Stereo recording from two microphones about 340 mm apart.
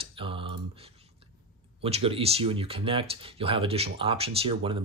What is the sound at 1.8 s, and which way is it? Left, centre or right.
Speech, centre.